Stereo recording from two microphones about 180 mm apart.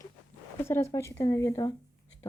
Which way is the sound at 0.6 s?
15° left (ahead or behind).